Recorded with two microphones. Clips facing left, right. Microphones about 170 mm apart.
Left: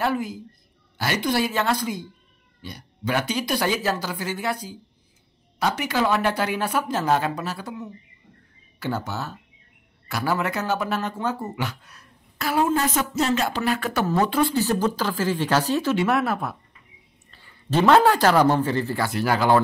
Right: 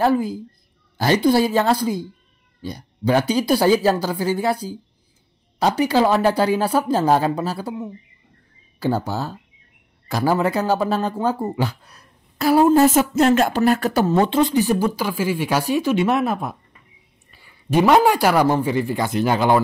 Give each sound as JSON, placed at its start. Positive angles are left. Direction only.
{"t": 0.0, "sound": "speech", "side_deg": -35}
{"t": 5.8, "sound": "speech", "side_deg": -35}
{"t": 14.0, "sound": "speech", "side_deg": -25}